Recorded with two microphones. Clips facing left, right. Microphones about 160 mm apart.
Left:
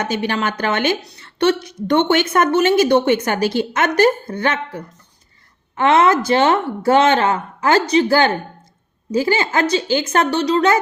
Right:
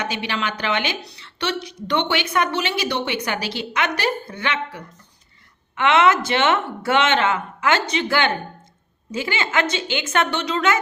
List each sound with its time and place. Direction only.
0.0 s speech: 45° left (ahead or behind)